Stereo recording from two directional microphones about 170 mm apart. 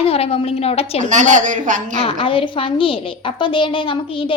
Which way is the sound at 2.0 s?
35° left (ahead or behind).